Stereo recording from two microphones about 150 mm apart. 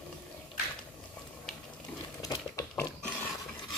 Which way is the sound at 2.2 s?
20° left (ahead or behind).